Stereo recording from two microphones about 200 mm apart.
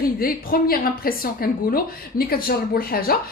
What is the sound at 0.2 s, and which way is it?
Speech, 45° left (ahead or behind).